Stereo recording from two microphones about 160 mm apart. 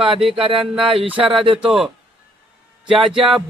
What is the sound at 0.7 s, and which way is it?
Speech, 35° right (ahead or behind).